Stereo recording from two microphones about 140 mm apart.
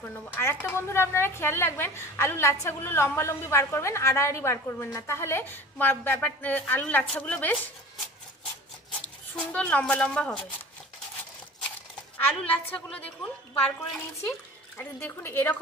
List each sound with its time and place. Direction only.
0.3 s a woman's voice: 15° left (ahead or behind)
9.3 s a woman's voice: 10° left (ahead or behind)
12.4 s a woman's voice: 10° left (ahead or behind)
14.8 s a woman's voice: 15° left (ahead or behind)